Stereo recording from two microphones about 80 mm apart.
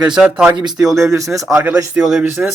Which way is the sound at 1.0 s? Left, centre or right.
Right.